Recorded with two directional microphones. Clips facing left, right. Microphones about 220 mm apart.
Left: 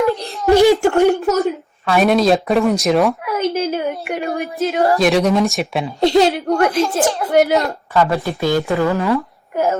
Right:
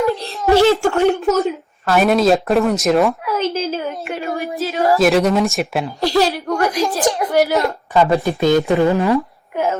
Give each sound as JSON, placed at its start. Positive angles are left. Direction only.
{"t": 0.3, "sound": "a woman's voice", "side_deg": 15}
{"t": 3.3, "sound": "a woman's voice", "side_deg": 15}
{"t": 4.9, "sound": "speech", "side_deg": 0}
{"t": 6.0, "sound": "a woman's voice", "side_deg": 20}
{"t": 6.7, "sound": "speech", "side_deg": -15}